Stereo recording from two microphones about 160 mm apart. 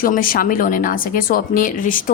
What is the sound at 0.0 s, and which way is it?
A woman's voice, 60° left (ahead or behind).